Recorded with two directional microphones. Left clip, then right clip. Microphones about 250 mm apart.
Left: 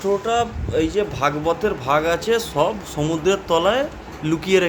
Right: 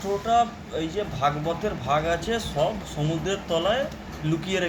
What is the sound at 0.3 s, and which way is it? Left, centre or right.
Speech, left.